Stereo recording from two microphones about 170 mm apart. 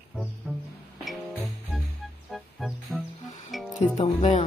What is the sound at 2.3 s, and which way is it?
Music, centre (ahead or behind).